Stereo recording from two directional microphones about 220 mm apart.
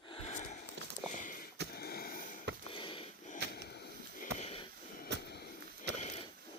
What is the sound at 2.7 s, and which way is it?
Sniff, 25° left (ahead or behind).